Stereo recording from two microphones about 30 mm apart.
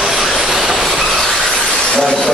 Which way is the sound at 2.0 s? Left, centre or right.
Centre.